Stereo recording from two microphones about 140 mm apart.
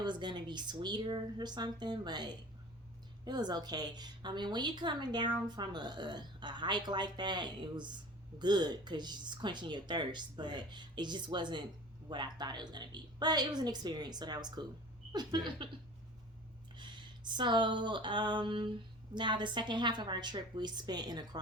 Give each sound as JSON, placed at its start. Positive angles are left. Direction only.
{"t": 0.0, "sound": "a woman's voice", "side_deg": -35}
{"t": 16.7, "sound": "a woman's voice", "side_deg": -35}